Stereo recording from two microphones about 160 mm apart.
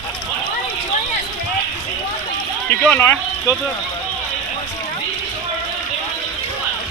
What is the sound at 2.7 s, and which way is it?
Speech, 10° left (ahead or behind).